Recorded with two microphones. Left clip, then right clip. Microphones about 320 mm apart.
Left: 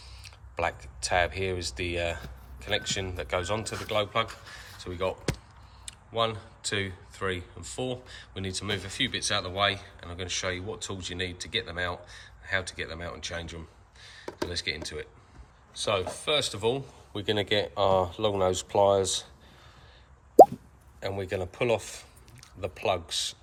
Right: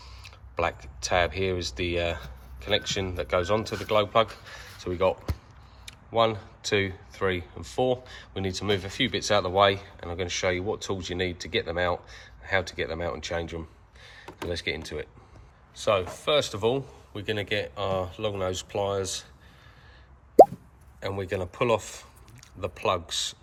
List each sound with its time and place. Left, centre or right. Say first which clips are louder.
0.3 s speech: right 2 dB; centre
17.1 s speech: left 3 dB; centre
21.0 s speech: right 1 dB; centre